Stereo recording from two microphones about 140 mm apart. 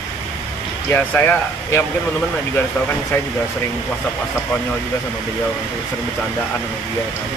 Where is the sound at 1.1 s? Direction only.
15° left (ahead or behind).